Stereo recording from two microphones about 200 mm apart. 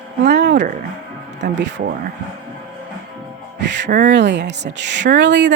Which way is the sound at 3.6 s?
60° right (ahead or behind).